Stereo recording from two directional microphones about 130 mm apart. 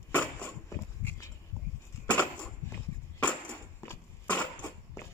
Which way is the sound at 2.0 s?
10° left (ahead or behind).